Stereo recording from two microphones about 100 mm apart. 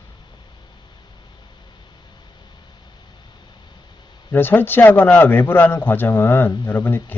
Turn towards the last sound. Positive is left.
turn(degrees=20)  # may be behind; listen again after turning